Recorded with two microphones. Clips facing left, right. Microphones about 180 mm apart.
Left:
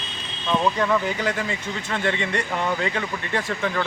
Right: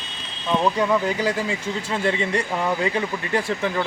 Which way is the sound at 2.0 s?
35° right (ahead or behind).